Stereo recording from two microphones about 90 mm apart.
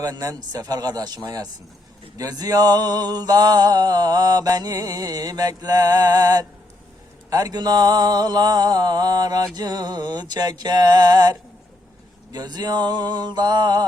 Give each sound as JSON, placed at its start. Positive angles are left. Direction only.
{"t": 0.0, "sound": "mantra", "side_deg": -45}